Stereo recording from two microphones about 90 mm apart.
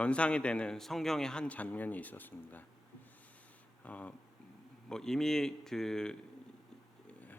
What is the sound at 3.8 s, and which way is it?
A man's voice, 15° left (ahead or behind).